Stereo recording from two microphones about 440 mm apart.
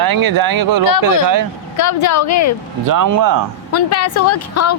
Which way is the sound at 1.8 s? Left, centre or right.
Left.